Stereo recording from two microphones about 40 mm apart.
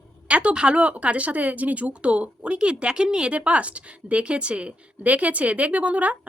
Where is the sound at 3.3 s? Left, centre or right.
Right.